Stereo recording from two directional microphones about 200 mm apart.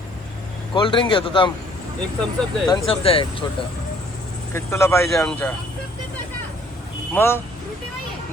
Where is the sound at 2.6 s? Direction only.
25° left (ahead or behind).